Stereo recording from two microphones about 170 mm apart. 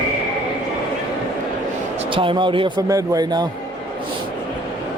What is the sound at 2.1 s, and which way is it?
Speech, 30° right (ahead or behind).